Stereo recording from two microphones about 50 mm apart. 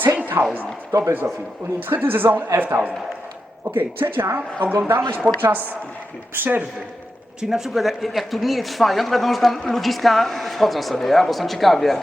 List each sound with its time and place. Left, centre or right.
0.4 s speech: right
0.9 s speech: right
1.9 s a woman's voice: right
7.5 s speech: centre